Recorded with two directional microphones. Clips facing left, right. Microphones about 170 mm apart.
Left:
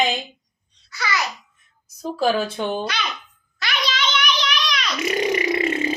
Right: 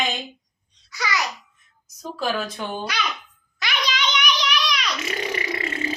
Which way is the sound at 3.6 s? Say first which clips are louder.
Left 1 dB; 15° right (ahead or behind).